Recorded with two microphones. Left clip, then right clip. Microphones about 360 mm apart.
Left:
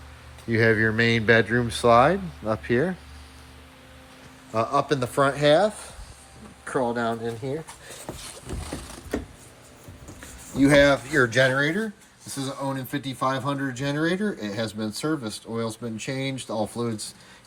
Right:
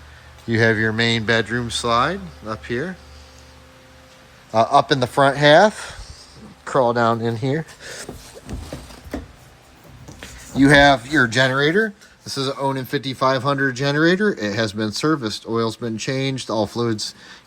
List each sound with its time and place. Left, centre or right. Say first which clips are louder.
0.5 s speech: right 3 dB; centre
4.5 s speech: right 8 dB; centre
7.1 s speech: right 8 dB; right
10.2 s speech: right 5 dB; centre